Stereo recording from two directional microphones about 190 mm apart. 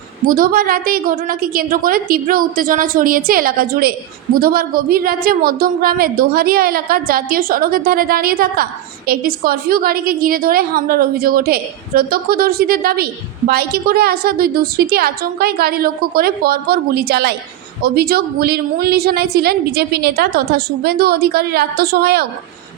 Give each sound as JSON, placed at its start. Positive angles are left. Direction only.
{"t": 0.3, "sound": "a woman's voice", "side_deg": -50}